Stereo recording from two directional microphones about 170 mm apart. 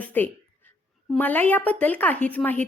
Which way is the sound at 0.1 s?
10° left (ahead or behind).